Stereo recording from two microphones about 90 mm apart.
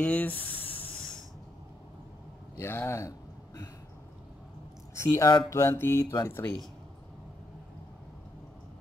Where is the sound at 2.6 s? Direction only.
30° left (ahead or behind).